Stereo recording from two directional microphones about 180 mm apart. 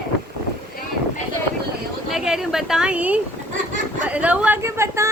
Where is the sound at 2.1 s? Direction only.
5° right (ahead or behind).